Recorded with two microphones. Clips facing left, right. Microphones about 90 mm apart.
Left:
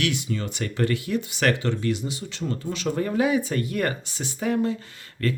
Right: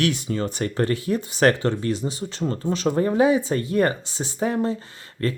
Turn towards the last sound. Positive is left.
turn(degrees=-30)  # may be behind; listen again after turning